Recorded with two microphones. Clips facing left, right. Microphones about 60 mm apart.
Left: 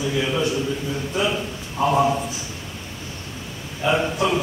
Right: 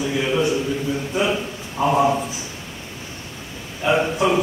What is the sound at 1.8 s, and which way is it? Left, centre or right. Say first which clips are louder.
Speech: right 1 dB; centre.